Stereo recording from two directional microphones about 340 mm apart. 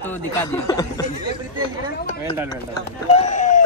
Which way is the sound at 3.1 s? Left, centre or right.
Centre.